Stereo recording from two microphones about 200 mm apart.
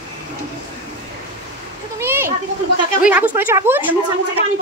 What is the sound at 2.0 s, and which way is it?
Children playing, 10° right (ahead or behind).